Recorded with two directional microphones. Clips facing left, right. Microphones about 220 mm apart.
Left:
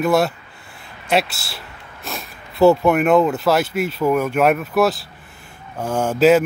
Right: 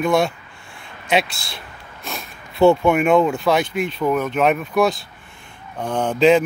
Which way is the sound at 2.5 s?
Centre (ahead or behind).